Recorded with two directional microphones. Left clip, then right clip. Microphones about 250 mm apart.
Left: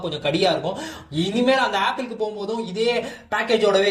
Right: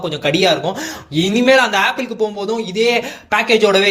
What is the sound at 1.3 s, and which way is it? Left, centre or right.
Speech, right.